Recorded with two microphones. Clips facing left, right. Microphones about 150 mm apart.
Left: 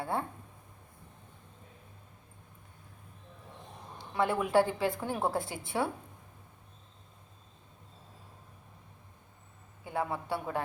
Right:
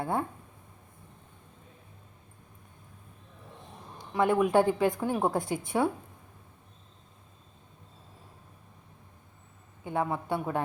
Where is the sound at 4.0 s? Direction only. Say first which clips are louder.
Right 5 dB; 20° right (ahead or behind).